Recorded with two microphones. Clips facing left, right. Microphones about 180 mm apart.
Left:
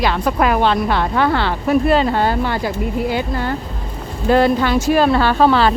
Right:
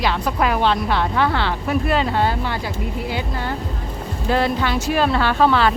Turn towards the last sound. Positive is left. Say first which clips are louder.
# left 3 dB
turn(degrees=35)  # may be behind; listen again after turning